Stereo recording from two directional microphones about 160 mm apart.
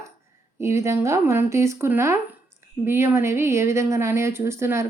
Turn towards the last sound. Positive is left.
turn(degrees=-15)  # may be behind; listen again after turning